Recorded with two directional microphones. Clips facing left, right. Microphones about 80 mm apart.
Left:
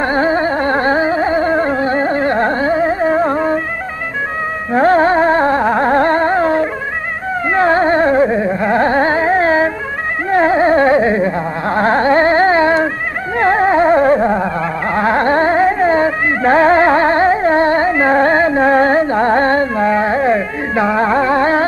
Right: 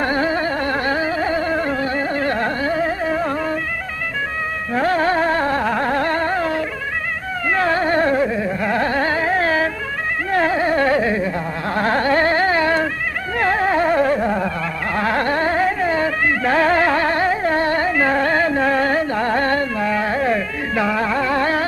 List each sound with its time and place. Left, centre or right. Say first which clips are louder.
0.0 s carnatic music: left 5 dB; left
4.7 s carnatic music: left 7 dB; left
13.4 s a sound: left 6 dB; left